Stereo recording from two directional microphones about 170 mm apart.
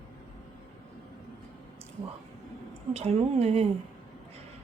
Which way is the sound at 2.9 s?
40° right (ahead or behind).